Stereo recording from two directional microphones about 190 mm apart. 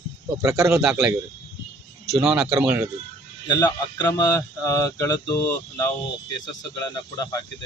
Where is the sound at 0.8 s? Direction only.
5° right (ahead or behind).